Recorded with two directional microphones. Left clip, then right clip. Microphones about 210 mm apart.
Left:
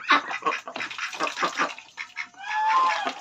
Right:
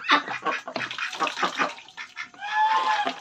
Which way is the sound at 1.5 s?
35° left (ahead or behind).